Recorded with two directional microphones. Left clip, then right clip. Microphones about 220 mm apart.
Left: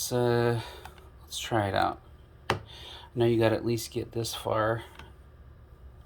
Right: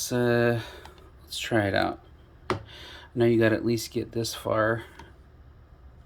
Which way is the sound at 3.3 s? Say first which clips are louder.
Right 2 dB; 35° right (ahead or behind).